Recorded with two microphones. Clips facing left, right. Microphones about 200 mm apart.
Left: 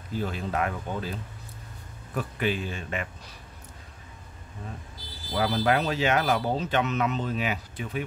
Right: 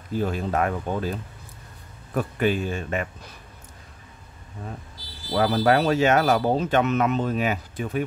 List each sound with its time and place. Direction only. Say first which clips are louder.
0.1 s speech: right 5 dB; 50° right (ahead or behind)
2.1 s speech: right 5 dB; 45° right (ahead or behind)
5.3 s speech: right 5 dB; 50° right (ahead or behind)